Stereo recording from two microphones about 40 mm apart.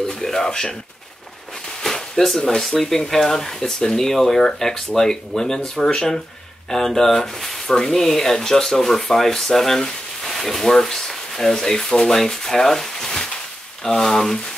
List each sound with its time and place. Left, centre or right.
0.1 s speech: centre
1.8 s speech: centre